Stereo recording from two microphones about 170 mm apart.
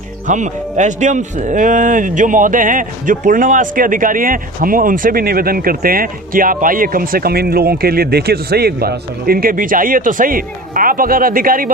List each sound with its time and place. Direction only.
0.3 s speech: 45° right (ahead or behind)